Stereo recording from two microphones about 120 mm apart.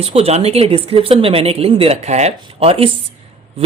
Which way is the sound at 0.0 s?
55° right (ahead or behind).